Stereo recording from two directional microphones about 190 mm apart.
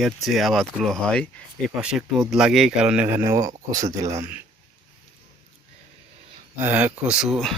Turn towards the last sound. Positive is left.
turn(degrees=0)  # may be behind; listen again after turning